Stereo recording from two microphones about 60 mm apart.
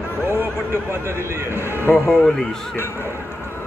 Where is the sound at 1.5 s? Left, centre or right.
Left.